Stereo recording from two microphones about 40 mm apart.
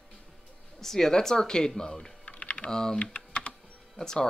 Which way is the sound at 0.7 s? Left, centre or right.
Centre.